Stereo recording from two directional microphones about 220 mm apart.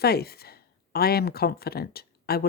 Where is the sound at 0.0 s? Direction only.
45° left (ahead or behind).